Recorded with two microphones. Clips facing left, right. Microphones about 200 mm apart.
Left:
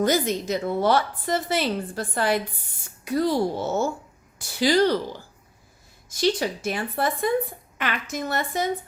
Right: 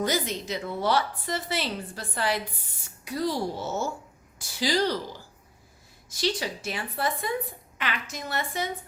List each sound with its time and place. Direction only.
0.0 s a woman's voice: 45° left (ahead or behind)
6.1 s a woman's voice: 50° left (ahead or behind)